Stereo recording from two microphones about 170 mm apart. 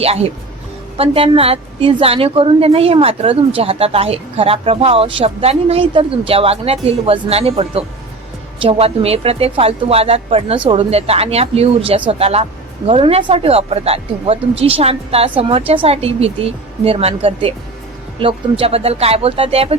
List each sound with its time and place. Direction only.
0.0 s a woman's voice: 35° right (ahead or behind)